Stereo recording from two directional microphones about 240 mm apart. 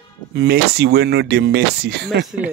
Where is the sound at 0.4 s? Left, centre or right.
Right.